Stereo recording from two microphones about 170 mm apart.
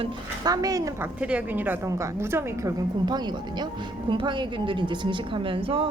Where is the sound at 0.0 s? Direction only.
20° right (ahead or behind).